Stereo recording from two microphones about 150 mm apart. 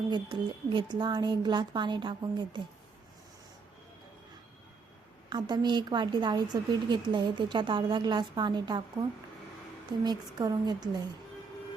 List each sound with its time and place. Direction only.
0.1 s a woman's voice: 35° right (ahead or behind)
5.3 s a woman's voice: 30° right (ahead or behind)
10.0 s a woman's voice: 25° right (ahead or behind)